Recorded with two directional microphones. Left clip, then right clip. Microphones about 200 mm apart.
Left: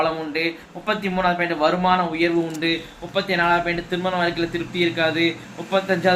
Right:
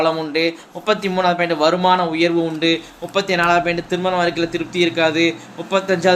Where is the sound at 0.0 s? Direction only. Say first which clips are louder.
Right 5 dB; 45° right (ahead or behind).